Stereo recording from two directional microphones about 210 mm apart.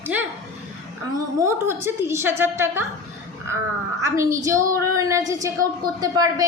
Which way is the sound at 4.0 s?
15° right (ahead or behind).